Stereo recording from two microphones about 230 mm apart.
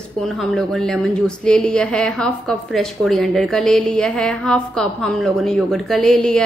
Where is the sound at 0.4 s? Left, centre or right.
Centre.